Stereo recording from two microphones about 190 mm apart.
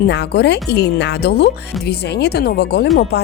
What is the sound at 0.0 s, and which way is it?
Speech, 60° left (ahead or behind).